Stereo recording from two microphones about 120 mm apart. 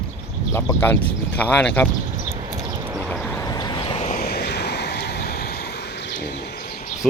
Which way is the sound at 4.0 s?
70° left (ahead or behind).